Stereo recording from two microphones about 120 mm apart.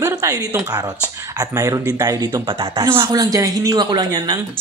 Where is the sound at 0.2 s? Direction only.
30° right (ahead or behind).